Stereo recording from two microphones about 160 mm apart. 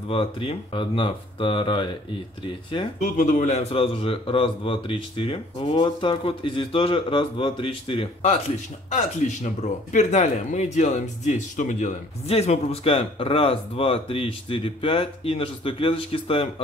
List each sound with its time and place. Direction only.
0.1 s a man's voice: 35° left (ahead or behind)
3.0 s a man's voice: 50° left (ahead or behind); by 8.1 s 35° left (ahead or behind)
8.9 s a man's voice: 45° left (ahead or behind)
12.3 s a man's voice: 40° left (ahead or behind)